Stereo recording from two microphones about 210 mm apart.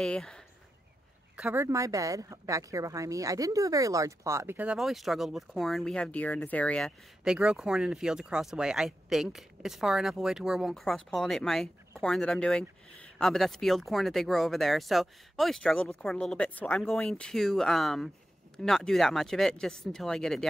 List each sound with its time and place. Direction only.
0.0 s speech: 5° left (ahead or behind)
1.3 s speech: 10° right (ahead or behind)